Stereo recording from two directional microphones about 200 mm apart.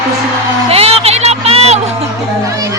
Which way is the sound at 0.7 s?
30° right (ahead or behind).